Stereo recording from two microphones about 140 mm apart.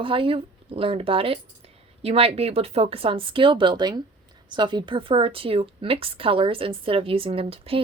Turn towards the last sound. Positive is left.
turn(degrees=-40)  # may be behind; listen again after turning